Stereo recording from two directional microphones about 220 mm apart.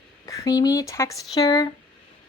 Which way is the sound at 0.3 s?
15° left (ahead or behind).